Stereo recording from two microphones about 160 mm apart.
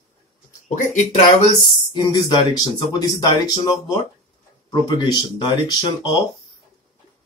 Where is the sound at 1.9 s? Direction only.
30° left (ahead or behind).